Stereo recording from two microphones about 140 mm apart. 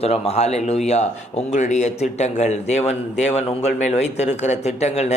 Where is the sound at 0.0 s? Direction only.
50° left (ahead or behind).